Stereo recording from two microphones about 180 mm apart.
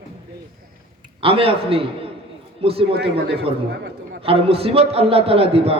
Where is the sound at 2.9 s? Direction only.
70° right (ahead or behind).